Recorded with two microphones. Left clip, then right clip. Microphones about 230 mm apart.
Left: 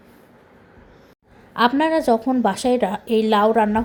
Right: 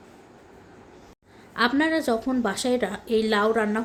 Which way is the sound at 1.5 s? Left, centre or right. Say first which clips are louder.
Left 5 dB; centre.